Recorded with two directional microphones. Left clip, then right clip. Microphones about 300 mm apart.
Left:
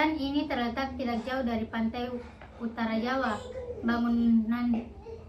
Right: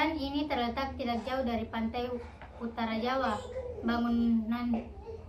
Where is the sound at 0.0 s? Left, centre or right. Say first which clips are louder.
Left 3 dB; centre.